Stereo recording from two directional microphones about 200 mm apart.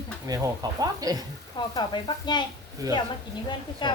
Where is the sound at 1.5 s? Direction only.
20° left (ahead or behind).